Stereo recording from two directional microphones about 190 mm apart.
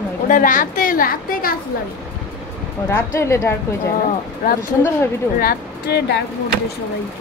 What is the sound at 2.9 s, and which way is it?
Speech, 15° left (ahead or behind).